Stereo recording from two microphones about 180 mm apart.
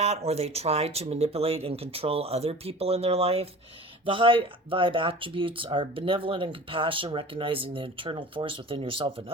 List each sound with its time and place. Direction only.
0.0 s speech: 35° right (ahead or behind)